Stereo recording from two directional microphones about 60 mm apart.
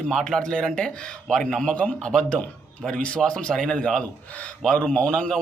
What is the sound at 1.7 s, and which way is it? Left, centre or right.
A man's voice, left.